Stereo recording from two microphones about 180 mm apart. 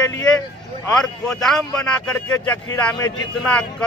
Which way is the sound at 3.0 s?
20° left (ahead or behind).